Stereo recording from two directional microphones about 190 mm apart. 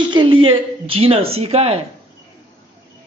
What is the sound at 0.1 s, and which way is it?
Speech, 25° right (ahead or behind).